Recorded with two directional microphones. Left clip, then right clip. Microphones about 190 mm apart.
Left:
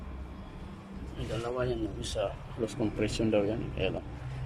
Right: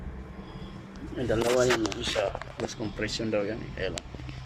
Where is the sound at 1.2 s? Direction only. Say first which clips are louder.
Right 11 dB; 35° right (ahead or behind).